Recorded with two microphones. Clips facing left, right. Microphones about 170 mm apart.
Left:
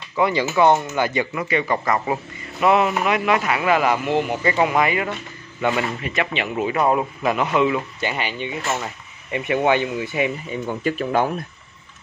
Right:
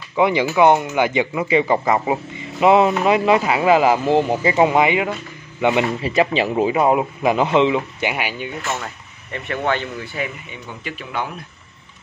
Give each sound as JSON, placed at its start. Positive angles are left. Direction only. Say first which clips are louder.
{"t": 0.1, "sound": "speech", "louder": "right 3 dB", "side_deg": -15}
{"t": 6.0, "sound": "speech", "louder": "right 6 dB", "side_deg": -35}
{"t": 6.7, "sound": "speech", "louder": "right 3 dB", "side_deg": -15}
{"t": 8.7, "sound": "speech", "louder": "left 1 dB", "side_deg": 15}
{"t": 10.5, "sound": "speech", "louder": "left 9 dB", "side_deg": 40}